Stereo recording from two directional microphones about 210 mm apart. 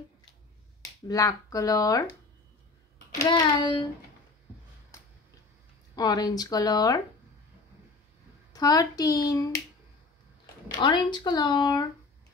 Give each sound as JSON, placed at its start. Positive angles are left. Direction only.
{"t": 1.0, "sound": "speech", "side_deg": 15}
{"t": 3.2, "sound": "speech", "side_deg": 20}
{"t": 5.9, "sound": "speech", "side_deg": 20}
{"t": 8.5, "sound": "speech", "side_deg": 15}
{"t": 10.8, "sound": "speech", "side_deg": 20}